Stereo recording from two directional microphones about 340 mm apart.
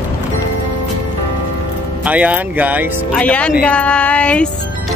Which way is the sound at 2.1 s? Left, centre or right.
Centre.